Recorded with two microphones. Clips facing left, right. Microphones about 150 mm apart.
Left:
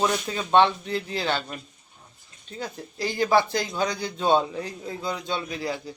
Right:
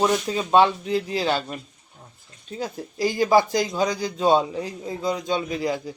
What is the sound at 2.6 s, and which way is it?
Speech, 10° right (ahead or behind).